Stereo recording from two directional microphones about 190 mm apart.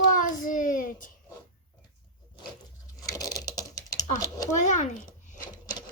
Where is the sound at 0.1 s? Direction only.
45° left (ahead or behind).